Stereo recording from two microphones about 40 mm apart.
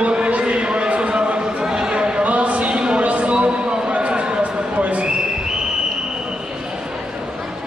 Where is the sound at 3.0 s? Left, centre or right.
Right.